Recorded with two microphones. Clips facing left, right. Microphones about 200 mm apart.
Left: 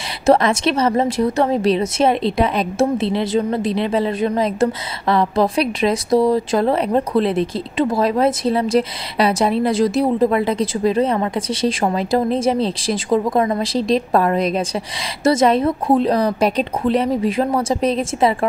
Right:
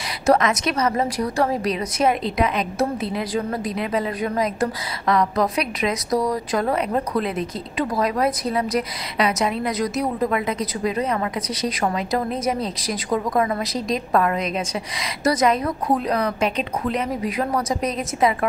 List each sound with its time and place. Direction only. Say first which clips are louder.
0.3 s a woman's voice: left 4 dB; 30° left (ahead or behind)